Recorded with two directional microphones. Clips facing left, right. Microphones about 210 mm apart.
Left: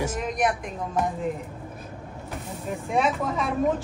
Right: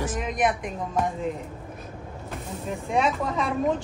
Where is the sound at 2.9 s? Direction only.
Centre (ahead or behind).